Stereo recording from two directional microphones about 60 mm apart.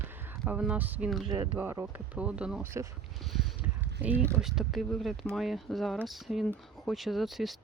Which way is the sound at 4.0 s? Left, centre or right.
Right.